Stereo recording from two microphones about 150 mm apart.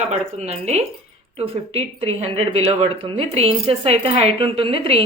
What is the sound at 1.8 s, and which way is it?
Speech, 40° right (ahead or behind).